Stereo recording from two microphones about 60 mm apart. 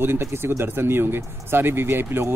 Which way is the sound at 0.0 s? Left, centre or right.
Right.